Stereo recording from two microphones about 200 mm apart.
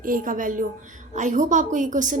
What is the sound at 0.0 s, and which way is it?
A woman's voice, 45° right (ahead or behind).